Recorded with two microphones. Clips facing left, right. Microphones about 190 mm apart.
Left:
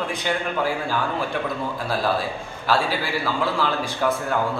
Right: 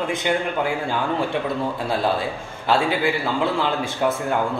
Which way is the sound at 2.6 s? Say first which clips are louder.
Right 3 dB; 25° right (ahead or behind).